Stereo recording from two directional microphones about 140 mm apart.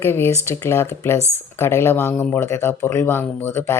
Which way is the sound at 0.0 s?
15° left (ahead or behind).